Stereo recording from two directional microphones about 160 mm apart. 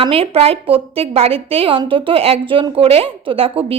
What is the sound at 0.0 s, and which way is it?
A woman's voice, 35° right (ahead or behind).